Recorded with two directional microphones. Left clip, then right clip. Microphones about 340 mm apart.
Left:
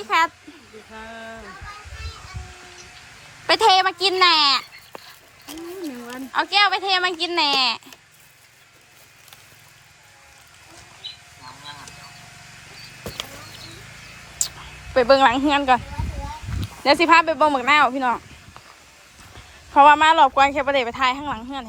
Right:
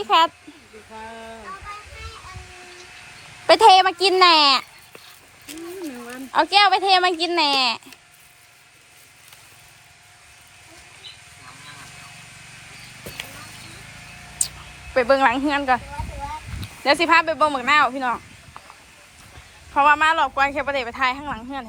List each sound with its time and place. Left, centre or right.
3.4 s speech: centre
6.3 s speech: centre
11.0 s a sound: left
14.9 s speech: centre
16.8 s speech: centre
19.7 s speech: centre